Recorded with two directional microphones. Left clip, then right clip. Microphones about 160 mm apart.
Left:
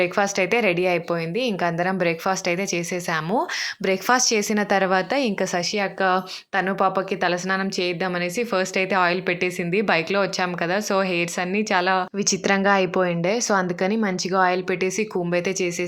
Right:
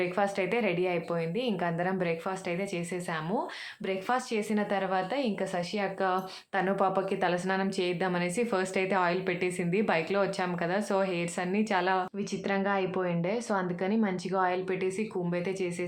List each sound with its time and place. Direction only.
0.0 s a woman's voice: 30° left (ahead or behind)
3.8 s a woman's voice: 45° left (ahead or behind); by 12.0 s 25° left (ahead or behind)
12.2 s speech: 40° left (ahead or behind)